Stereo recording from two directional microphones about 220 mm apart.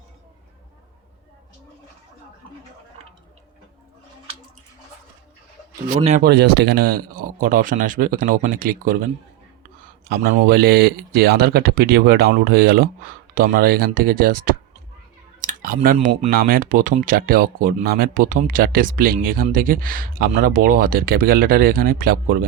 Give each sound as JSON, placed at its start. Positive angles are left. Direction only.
{"t": 6.0, "sound": "speech", "side_deg": -30}
{"t": 6.2, "sound": "speech", "side_deg": -50}
{"t": 10.1, "sound": "speech", "side_deg": -45}